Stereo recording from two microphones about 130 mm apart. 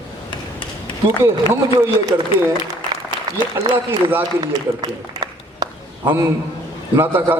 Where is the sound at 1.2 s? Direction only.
20° right (ahead or behind).